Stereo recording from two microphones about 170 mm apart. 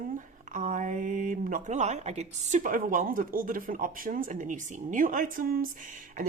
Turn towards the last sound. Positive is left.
turn(degrees=-50)  # may be behind; listen again after turning